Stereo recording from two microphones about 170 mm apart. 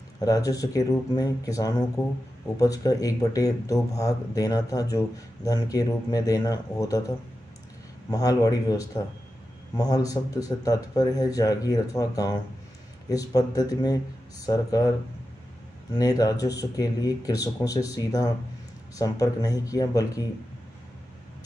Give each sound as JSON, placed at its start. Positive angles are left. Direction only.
{"t": 0.2, "sound": "speech", "side_deg": 20}
{"t": 8.1, "sound": "speech", "side_deg": 20}